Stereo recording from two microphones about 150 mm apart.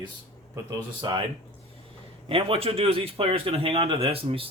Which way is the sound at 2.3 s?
40° right (ahead or behind).